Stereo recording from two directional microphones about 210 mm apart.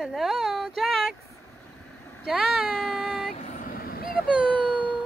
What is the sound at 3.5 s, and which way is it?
Vehicle, 45° left (ahead or behind).